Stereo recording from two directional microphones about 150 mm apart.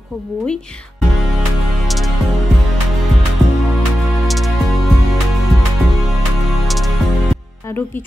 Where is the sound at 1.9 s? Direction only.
Centre (ahead or behind).